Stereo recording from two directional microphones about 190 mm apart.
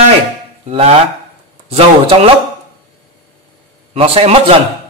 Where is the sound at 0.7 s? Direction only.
30° right (ahead or behind).